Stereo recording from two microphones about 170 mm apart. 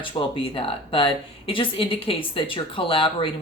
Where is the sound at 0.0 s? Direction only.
30° left (ahead or behind).